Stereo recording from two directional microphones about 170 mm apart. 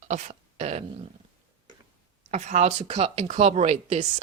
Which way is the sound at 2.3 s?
45° right (ahead or behind).